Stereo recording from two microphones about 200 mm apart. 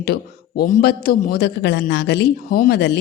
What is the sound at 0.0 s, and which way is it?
A man's voice, 50° left (ahead or behind).